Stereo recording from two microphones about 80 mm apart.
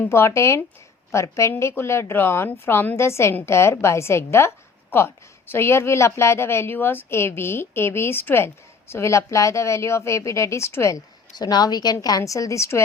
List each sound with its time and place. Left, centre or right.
0.1 s a woman's voice: left
11.3 s a woman's voice: left
11.9 s a woman's voice: left